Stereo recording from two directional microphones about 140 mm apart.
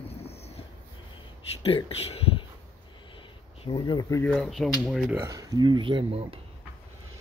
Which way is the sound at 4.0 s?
20° left (ahead or behind).